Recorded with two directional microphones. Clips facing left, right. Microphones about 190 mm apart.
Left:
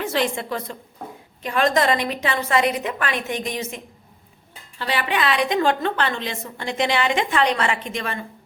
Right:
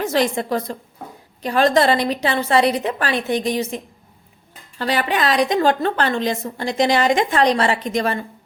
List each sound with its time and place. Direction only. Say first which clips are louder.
0.0 s a woman's voice: right 4 dB; 40° right (ahead or behind)
4.8 s a woman's voice: right 3 dB; 40° right (ahead or behind)